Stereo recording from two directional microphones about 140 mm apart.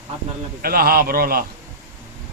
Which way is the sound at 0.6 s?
90° right.